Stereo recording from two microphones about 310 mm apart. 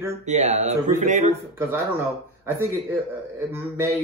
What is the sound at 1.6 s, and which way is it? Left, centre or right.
Speech, centre.